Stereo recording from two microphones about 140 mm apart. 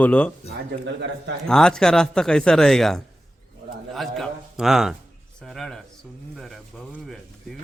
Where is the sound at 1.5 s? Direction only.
5° left (ahead or behind).